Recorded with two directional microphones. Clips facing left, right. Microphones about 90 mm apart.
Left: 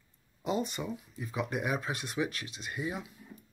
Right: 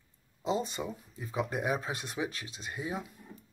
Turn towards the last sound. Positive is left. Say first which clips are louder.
# even
turn(degrees=-35)  # may be behind; listen again after turning